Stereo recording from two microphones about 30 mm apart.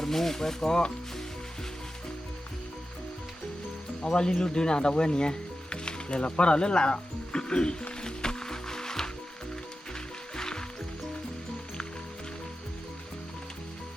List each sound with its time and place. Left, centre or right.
0.0 s speech: centre
4.0 s speech: left
8.0 s music: left
10.3 s music: left